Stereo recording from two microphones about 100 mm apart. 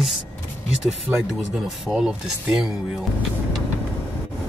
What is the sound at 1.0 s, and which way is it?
Speech, 15° right (ahead or behind).